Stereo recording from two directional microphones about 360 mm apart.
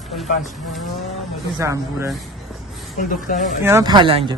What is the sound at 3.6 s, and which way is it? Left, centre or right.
Speech, centre.